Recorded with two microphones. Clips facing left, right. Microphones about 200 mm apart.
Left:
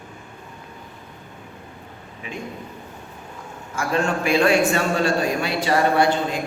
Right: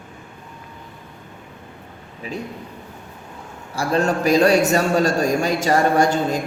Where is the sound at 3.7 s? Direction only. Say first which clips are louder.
Right 3 dB; 35° right (ahead or behind).